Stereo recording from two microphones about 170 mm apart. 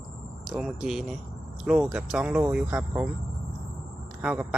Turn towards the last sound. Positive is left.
turn(degrees=-10)  # may be behind; listen again after turning